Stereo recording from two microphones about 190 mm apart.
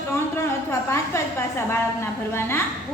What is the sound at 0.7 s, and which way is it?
A woman's voice, 15° left (ahead or behind).